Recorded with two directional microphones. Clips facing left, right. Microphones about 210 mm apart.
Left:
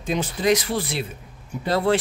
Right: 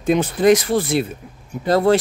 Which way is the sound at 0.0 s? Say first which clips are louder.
Right 8 dB; 55° right (ahead or behind).